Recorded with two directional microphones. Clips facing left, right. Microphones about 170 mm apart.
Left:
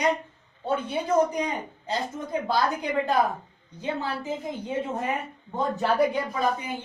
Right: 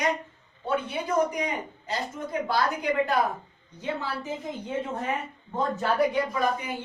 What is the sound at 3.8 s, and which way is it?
A woman's voice, 15° left (ahead or behind).